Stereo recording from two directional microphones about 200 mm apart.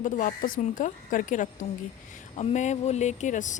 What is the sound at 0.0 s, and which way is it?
A woman's voice, 40° left (ahead or behind).